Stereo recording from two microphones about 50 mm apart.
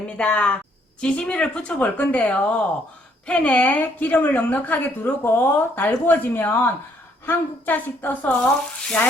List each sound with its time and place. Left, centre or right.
0.2 s speech: left
1.8 s speech: left
8.4 s speech: left